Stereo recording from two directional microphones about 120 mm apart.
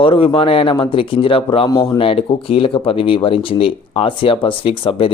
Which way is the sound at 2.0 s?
50° left (ahead or behind).